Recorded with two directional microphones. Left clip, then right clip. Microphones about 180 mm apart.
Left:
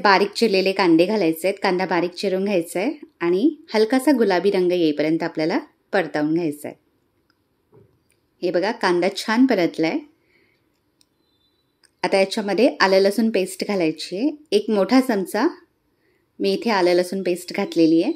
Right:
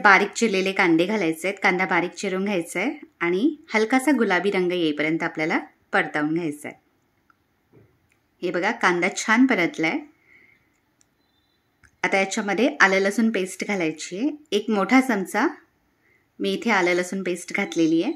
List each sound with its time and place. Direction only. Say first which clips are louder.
0.0 s a woman's voice: even; 15° left (ahead or behind)
8.4 s a woman's voice: left 2 dB; 15° left (ahead or behind)
12.0 s a woman's voice: left 3 dB; 15° left (ahead or behind)